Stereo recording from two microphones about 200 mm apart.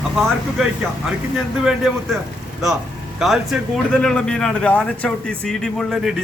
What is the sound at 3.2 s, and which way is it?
Speech, centre (ahead or behind).